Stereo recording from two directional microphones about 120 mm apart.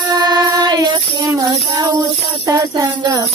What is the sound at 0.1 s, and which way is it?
Music, 35° right (ahead or behind).